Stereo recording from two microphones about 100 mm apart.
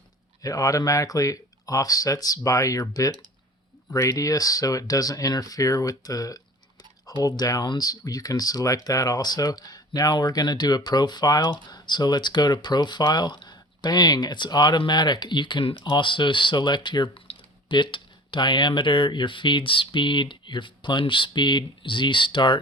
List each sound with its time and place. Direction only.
0.4 s speech: 35° left (ahead or behind); by 22.5 s 55° left (ahead or behind)